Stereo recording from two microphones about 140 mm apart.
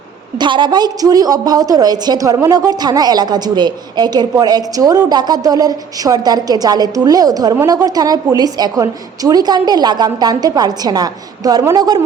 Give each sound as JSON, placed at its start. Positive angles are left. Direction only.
{"t": 0.3, "sound": "a woman's voice", "side_deg": -35}